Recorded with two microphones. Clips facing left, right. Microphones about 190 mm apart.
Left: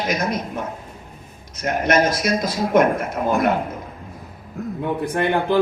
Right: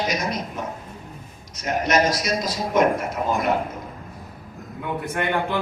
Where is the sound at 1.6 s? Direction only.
55° left (ahead or behind).